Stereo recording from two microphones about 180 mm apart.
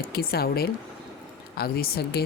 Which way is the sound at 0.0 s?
60° left (ahead or behind).